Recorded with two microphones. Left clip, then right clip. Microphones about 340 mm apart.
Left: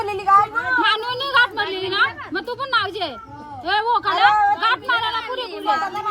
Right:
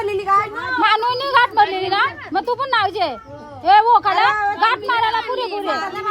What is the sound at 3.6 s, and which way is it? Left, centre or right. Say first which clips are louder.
Speech: right 7 dB; right.